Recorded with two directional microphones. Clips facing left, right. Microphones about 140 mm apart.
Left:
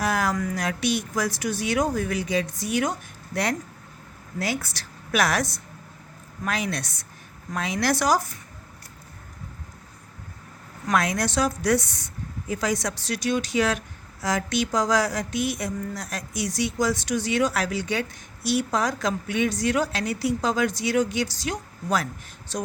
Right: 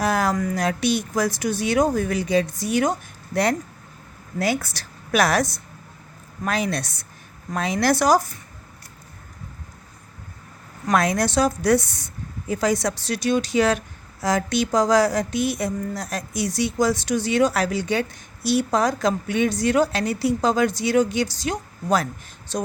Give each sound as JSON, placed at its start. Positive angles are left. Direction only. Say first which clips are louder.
{"t": 0.0, "sound": "a woman's voice", "louder": "right 3 dB", "side_deg": -30}
{"t": 4.4, "sound": "speech", "louder": "right 5 dB", "side_deg": -55}
{"t": 4.7, "sound": "a woman's voice", "louder": "right 4 dB", "side_deg": -35}
{"t": 10.8, "sound": "a woman's voice", "louder": "right 4 dB", "side_deg": -35}